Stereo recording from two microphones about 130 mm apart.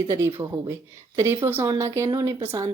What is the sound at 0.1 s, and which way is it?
Speech, 20° right (ahead or behind).